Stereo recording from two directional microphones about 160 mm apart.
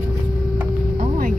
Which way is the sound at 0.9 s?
65° right (ahead or behind).